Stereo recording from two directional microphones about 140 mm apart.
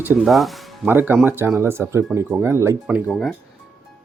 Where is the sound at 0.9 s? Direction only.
15° right (ahead or behind).